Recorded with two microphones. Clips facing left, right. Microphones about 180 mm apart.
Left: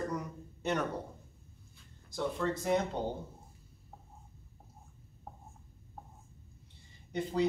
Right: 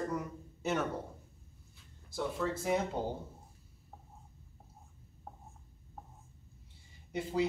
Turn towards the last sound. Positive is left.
turn(degrees=-5)  # may be behind; listen again after turning